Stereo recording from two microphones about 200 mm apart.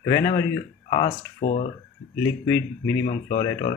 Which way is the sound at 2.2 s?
10° left (ahead or behind).